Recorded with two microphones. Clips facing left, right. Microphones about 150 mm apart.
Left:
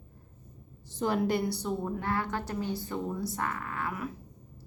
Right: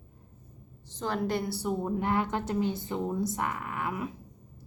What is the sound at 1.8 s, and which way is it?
Speech, 20° right (ahead or behind).